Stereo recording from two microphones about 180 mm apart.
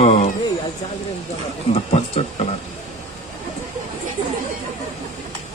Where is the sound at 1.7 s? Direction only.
35° left (ahead or behind).